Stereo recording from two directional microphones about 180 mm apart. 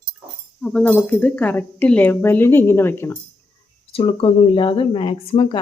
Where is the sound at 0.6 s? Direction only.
5° left (ahead or behind).